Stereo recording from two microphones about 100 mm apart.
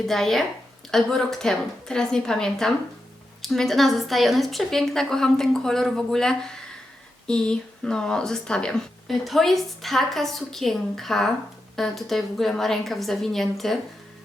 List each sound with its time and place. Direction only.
0.1 s speech: 5° left (ahead or behind)